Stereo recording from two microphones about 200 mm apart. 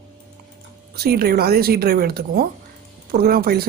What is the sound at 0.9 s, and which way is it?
A woman's voice, 50° right (ahead or behind).